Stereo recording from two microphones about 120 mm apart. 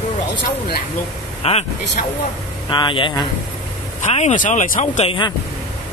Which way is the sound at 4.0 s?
65° left (ahead or behind).